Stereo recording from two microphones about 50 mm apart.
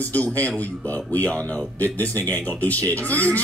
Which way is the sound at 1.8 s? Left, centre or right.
Left.